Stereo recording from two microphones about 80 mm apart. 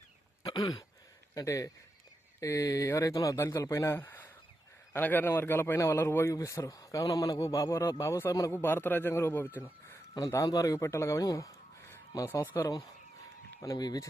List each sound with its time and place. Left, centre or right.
0.4 s throat clearing: left
1.4 s a man's voice: left
3.9 s a sound: left
4.9 s a man's voice: left
8.5 s speech: left
9.6 s a sound: left
10.2 s a man's voice: left
11.3 s a sound: left
13.6 s a man's voice: left